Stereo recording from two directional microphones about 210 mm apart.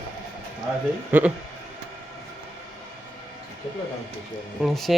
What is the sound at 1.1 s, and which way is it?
Speech, 10° right (ahead or behind).